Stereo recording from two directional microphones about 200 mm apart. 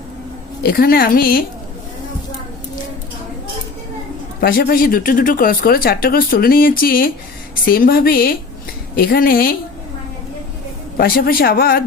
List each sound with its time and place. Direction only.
0.6 s speech: 50° left (ahead or behind)
4.4 s speech: 45° left (ahead or behind)
10.9 s speech: 50° left (ahead or behind)